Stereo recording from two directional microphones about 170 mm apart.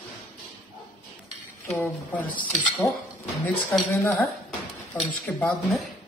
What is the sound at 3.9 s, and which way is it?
Speech, 15° left (ahead or behind).